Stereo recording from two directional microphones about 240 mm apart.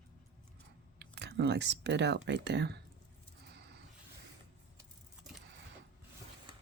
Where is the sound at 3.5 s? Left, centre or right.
Right.